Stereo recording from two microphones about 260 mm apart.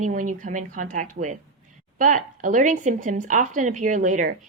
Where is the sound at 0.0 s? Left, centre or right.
Right.